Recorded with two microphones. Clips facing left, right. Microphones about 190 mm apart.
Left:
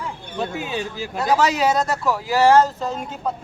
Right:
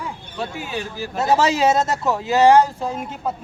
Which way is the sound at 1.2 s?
25° right (ahead or behind).